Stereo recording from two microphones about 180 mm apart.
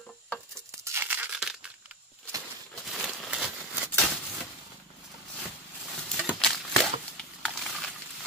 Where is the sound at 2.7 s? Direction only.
Centre (ahead or behind).